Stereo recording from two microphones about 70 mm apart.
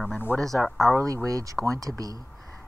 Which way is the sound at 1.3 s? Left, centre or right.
Right.